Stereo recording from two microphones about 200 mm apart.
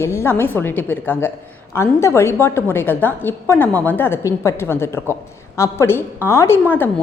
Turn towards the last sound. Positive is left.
turn(degrees=10)  # may be behind; listen again after turning